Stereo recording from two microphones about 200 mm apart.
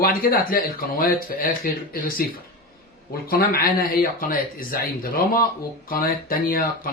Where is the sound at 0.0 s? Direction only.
45° left (ahead or behind).